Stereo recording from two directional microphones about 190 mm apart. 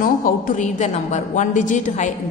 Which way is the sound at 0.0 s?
45° left (ahead or behind).